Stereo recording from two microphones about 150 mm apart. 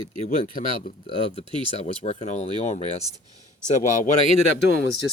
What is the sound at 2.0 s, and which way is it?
Speech, 50° left (ahead or behind).